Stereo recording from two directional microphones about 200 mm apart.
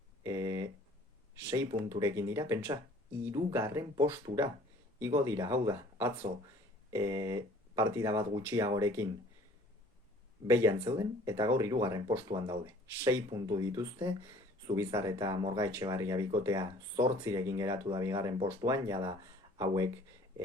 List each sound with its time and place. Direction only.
0.2 s a sound: 15° right (ahead or behind)
1.4 s speech: 15° right (ahead or behind)
10.4 s speech: 15° right (ahead or behind)